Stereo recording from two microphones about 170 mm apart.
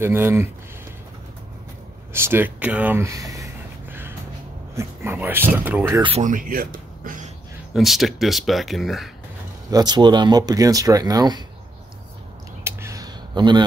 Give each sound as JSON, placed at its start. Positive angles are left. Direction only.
{"t": 0.0, "sound": "speech", "side_deg": -15}
{"t": 2.1, "sound": "speech", "side_deg": -15}
{"t": 4.7, "sound": "speech", "side_deg": -10}
{"t": 6.2, "sound": "speech", "side_deg": -55}
{"t": 7.7, "sound": "speech", "side_deg": 0}
{"t": 9.7, "sound": "speech", "side_deg": -25}
{"t": 12.6, "sound": "a sound", "side_deg": -20}